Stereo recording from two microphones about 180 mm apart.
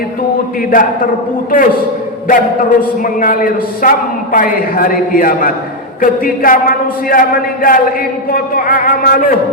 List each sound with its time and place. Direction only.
0.7 s a man's voice: 50° left (ahead or behind)